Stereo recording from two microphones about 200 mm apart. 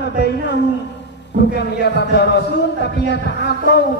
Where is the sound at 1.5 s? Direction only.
55° left (ahead or behind).